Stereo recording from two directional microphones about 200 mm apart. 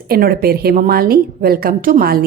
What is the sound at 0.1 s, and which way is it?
A woman's voice, 50° right (ahead or behind).